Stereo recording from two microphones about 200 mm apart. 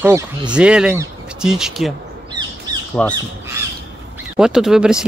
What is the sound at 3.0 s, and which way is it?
Speech, 5° left (ahead or behind).